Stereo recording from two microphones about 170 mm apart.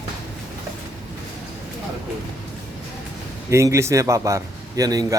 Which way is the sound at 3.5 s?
15° right (ahead or behind).